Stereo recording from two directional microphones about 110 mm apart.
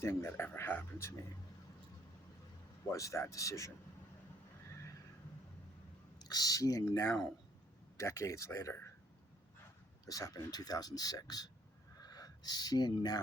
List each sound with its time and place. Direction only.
0.0 s speech: 25° left (ahead or behind)
2.9 s speech: 30° left (ahead or behind)
6.2 s speech: 35° left (ahead or behind)
10.1 s speech: 35° left (ahead or behind)
11.9 s a sound: 35° left (ahead or behind)